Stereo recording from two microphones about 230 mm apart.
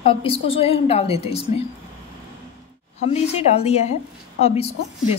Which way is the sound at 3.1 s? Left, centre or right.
Left.